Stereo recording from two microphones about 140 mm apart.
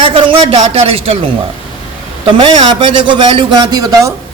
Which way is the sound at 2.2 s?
35° right (ahead or behind).